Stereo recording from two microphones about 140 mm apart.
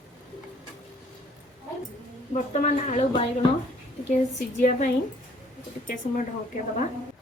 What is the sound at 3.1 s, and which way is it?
Speech, 35° left (ahead or behind).